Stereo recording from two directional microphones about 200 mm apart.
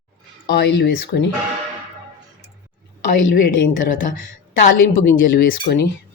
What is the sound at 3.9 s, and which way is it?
A woman's voice, 40° left (ahead or behind).